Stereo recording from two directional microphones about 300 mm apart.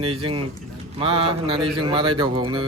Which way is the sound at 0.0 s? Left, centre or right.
Centre.